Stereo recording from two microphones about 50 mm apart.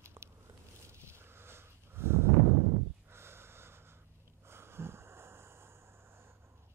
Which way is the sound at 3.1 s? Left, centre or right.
Right.